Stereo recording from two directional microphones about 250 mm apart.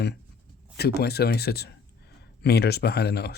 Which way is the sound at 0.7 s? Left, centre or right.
Left.